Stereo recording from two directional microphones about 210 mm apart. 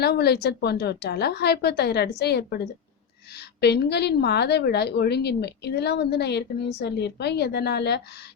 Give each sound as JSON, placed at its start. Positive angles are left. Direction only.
{"t": 0.0, "sound": "a woman's voice", "side_deg": 50}
{"t": 3.6, "sound": "a woman's voice", "side_deg": 50}